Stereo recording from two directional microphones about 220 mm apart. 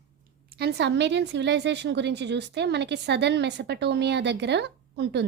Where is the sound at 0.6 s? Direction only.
50° right (ahead or behind).